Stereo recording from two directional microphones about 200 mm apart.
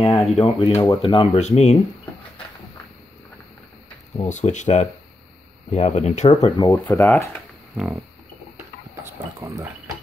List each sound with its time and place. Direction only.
0.0 s a sound: 30° left (ahead or behind)
0.3 s speech: centre (ahead or behind)
0.6 s speech: 30° left (ahead or behind)
4.2 s speech: 35° left (ahead or behind)
6.4 s speech: 20° left (ahead or behind)
7.7 s livestock: centre (ahead or behind)